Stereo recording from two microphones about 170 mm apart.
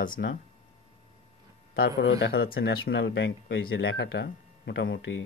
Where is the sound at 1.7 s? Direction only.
70° left (ahead or behind); by 5.2 s 90° left.